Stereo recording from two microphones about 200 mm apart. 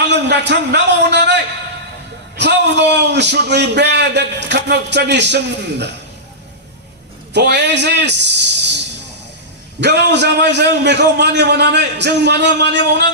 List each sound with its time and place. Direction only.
0.1 s a sound: 60° right (ahead or behind)
2.4 s a man's voice: 60° right (ahead or behind)
7.3 s a man's voice: 60° right (ahead or behind)
9.8 s a man's voice: 60° right (ahead or behind)